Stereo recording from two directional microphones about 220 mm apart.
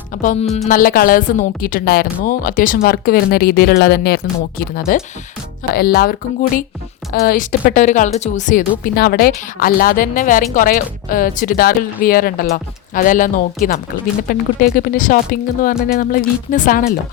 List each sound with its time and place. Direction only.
0.2 s speech: 35° left (ahead or behind)